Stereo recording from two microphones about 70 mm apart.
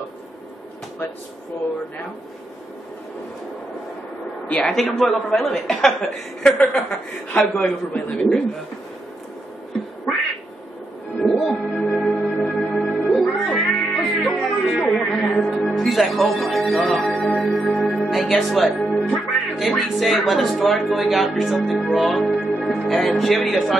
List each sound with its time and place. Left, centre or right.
4.5 s a man's voice: centre
4.7 s a woman's voice: centre
11.1 s music: centre
17.4 s singing bowl: centre
18.1 s a woman's voice: centre